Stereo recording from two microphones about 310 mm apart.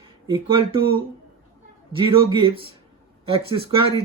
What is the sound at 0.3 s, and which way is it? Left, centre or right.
Speech, centre.